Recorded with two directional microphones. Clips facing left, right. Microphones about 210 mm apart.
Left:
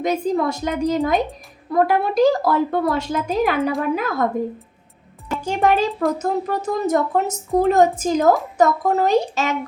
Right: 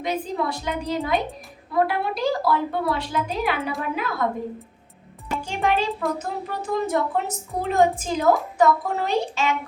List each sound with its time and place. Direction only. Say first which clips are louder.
0.0 s a woman's voice: left 6 dB; 45° left (ahead or behind)
5.5 s a woman's voice: left 5 dB; 45° left (ahead or behind)